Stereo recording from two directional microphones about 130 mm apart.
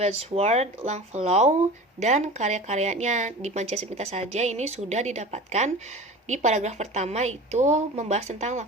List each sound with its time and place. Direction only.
0.0 s speech: 55° right (ahead or behind)